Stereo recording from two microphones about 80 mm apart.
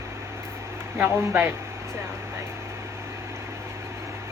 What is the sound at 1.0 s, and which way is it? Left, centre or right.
Speech, right.